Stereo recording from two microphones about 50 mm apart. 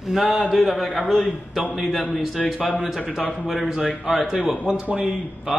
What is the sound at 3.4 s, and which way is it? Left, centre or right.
A man's voice, centre.